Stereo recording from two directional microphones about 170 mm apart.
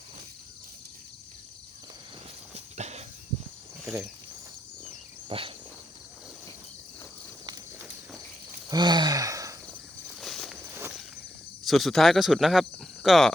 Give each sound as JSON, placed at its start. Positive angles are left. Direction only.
{"t": 2.7, "sound": "a sound", "side_deg": -40}
{"t": 5.3, "sound": "insect", "side_deg": -30}
{"t": 8.7, "sound": "gasp", "side_deg": -25}
{"t": 10.2, "sound": "walk", "side_deg": 0}
{"t": 11.6, "sound": "speech", "side_deg": 0}